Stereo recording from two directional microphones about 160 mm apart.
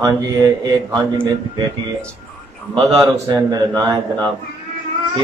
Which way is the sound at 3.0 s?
20° right (ahead or behind).